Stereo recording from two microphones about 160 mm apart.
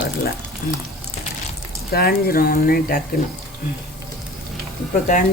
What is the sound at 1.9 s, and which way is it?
Speech, 70° left (ahead or behind).